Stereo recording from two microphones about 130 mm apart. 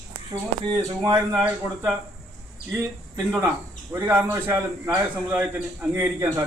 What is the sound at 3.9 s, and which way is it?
A man's voice, 20° right (ahead or behind).